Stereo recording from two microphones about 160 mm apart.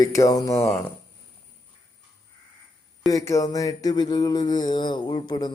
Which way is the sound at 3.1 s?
20° left (ahead or behind).